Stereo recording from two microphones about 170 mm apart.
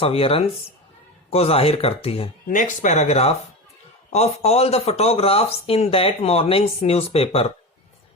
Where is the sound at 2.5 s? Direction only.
45° left (ahead or behind).